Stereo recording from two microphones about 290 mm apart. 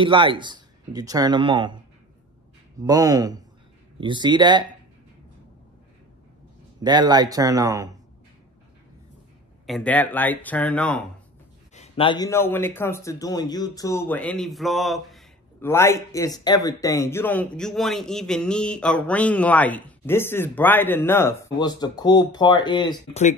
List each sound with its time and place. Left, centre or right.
0.0 s speech: centre
2.8 s speech: centre
6.8 s speech: centre
9.7 s speech: centre
11.7 s a man's voice: left